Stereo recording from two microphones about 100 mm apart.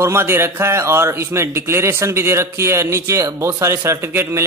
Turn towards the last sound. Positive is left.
turn(degrees=-25)  # may be behind; listen again after turning